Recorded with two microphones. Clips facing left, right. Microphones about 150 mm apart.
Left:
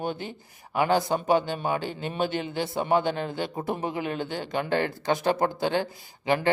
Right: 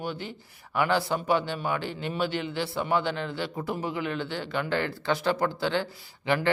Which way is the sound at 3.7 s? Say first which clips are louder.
Left 1 dB; 20° left (ahead or behind).